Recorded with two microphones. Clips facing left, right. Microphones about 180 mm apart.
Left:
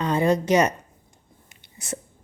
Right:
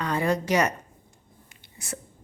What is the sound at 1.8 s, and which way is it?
Speech, 20° left (ahead or behind).